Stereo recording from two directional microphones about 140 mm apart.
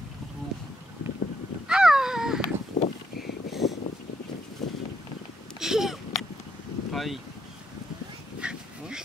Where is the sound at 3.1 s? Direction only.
90° left.